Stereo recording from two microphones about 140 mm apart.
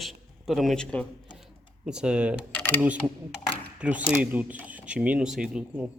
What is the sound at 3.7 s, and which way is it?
Speech, 10° right (ahead or behind).